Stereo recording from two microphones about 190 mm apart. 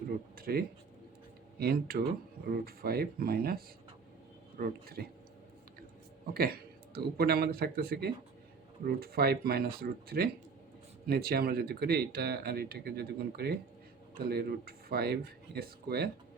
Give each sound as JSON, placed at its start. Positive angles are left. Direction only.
{"t": 0.3, "sound": "a sound", "side_deg": -50}
{"t": 1.5, "sound": "speech", "side_deg": -50}
{"t": 6.3, "sound": "speech", "side_deg": -55}